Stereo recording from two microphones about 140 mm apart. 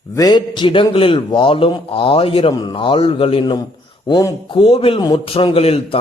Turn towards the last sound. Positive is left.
turn(degrees=45)  # may be behind; listen again after turning